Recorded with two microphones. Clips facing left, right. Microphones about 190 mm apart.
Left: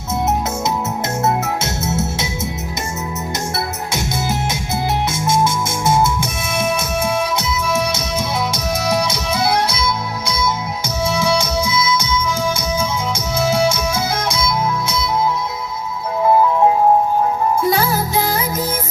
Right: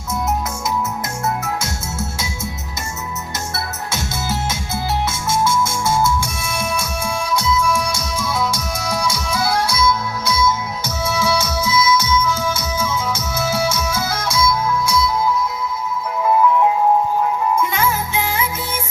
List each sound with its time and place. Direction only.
1.2 s music: 25° left (ahead or behind)
3.9 s music: 15° left (ahead or behind); by 18.8 s 40° left (ahead or behind)